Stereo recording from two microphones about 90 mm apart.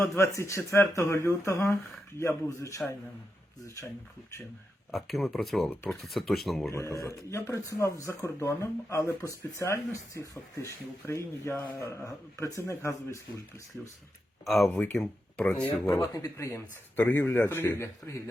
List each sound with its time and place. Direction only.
0.0 s speech: 35° left (ahead or behind)
4.9 s speech: centre (ahead or behind)
6.7 s speech: 30° left (ahead or behind)
14.4 s speech: centre (ahead or behind)
14.7 s speech: 15° left (ahead or behind)
16.2 s speech: 35° left (ahead or behind)
17.0 s a man's voice: 20° left (ahead or behind)